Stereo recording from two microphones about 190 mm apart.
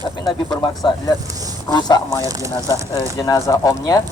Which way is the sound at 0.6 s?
20° left (ahead or behind).